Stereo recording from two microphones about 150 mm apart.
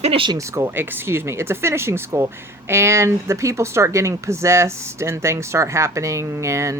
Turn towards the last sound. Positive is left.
turn(degrees=-20)  # may be behind; listen again after turning